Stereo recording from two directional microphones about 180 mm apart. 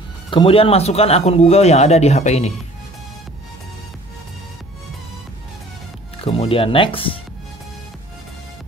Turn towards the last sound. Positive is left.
turn(degrees=30)  # may be behind; listen again after turning